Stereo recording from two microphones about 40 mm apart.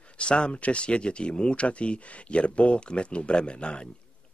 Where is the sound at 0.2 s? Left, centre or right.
Left.